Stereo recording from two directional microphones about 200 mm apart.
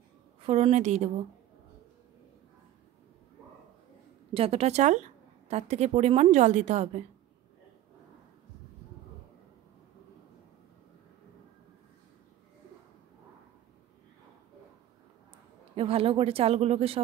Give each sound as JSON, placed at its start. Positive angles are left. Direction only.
{"t": 0.4, "sound": "a woman's voice", "side_deg": -30}
{"t": 4.3, "sound": "a woman's voice", "side_deg": -30}
{"t": 15.7, "sound": "speech", "side_deg": -30}